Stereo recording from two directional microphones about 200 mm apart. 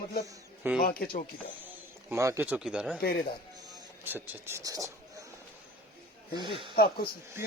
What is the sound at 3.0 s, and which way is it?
Speech, 50° left (ahead or behind).